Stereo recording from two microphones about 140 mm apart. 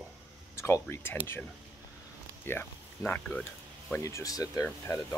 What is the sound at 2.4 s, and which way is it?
Speech, 15° left (ahead or behind).